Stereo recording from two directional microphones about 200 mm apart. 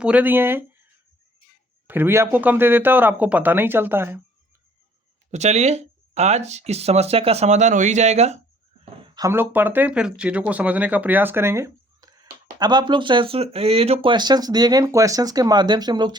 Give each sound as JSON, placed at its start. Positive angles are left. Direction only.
{"t": 0.0, "sound": "speech", "side_deg": -5}
{"t": 1.9, "sound": "speech", "side_deg": -10}
{"t": 5.3, "sound": "speech", "side_deg": -35}
{"t": 8.8, "sound": "speech", "side_deg": -20}